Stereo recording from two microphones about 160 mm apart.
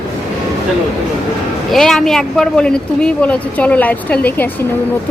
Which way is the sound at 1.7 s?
Centre (ahead or behind).